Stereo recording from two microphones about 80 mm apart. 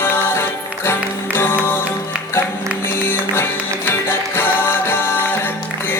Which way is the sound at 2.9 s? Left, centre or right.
Left.